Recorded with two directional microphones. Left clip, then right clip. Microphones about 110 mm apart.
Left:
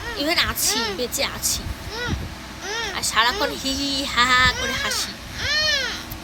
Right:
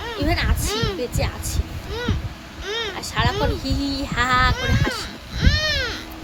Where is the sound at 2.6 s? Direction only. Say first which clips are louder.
Right 1 dB; 55° right (ahead or behind).